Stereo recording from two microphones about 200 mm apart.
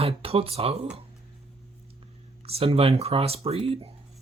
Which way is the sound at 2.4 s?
30° right (ahead or behind).